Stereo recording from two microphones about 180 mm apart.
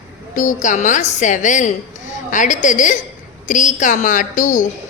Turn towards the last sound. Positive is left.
turn(degrees=45)  # may be behind; listen again after turning